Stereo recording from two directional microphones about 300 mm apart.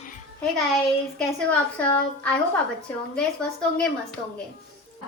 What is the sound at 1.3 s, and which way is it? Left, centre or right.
A woman's voice, centre.